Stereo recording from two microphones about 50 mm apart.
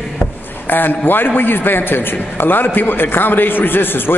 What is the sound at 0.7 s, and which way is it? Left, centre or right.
A man's voice, left.